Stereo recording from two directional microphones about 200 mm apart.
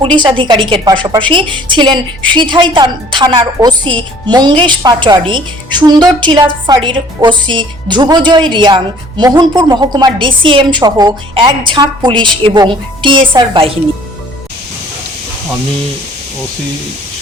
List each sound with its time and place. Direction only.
0.2 s a woman's voice: 25° right (ahead or behind)